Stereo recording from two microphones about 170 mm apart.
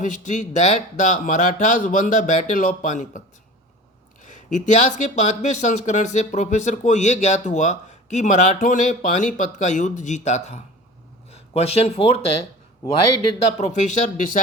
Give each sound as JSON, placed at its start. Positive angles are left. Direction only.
{"t": 0.0, "sound": "speech", "side_deg": 50}
{"t": 13.6, "sound": "speech", "side_deg": 45}